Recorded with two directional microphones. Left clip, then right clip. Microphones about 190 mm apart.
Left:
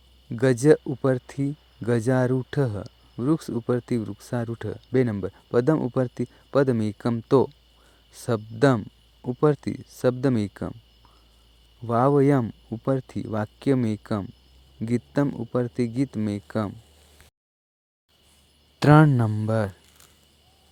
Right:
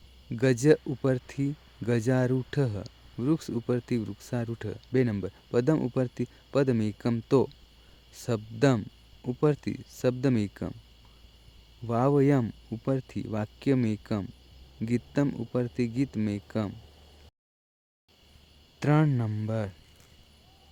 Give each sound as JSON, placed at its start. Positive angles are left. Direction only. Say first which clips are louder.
{"t": 0.3, "sound": "speech", "louder": "left 4 dB", "side_deg": 10}
{"t": 11.9, "sound": "speech", "louder": "left 5 dB", "side_deg": 10}
{"t": 18.8, "sound": "mantra", "louder": "left 9 dB", "side_deg": 35}